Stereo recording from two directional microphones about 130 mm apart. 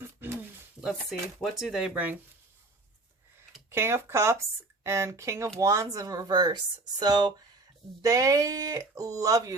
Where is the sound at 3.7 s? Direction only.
20° right (ahead or behind).